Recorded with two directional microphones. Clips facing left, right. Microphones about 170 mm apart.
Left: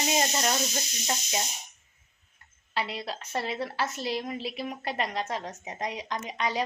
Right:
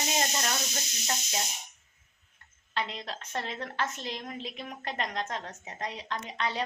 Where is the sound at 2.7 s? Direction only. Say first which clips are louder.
Left 2 dB; 10° left (ahead or behind).